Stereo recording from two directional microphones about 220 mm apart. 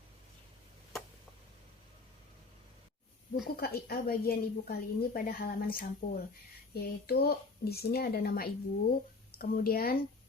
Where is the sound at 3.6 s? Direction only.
45° left (ahead or behind).